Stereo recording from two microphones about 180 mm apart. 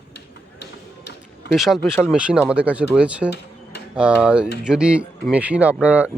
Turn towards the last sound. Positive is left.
turn(degrees=-5)  # may be behind; listen again after turning